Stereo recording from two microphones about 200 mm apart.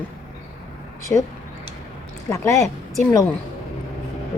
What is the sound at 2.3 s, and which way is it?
Speech, 15° left (ahead or behind).